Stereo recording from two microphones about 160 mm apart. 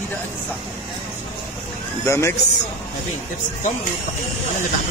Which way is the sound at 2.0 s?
15° left (ahead or behind).